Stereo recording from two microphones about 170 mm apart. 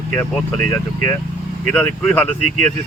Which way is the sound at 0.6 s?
15° left (ahead or behind).